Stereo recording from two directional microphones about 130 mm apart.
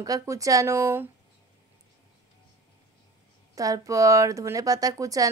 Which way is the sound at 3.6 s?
25° right (ahead or behind).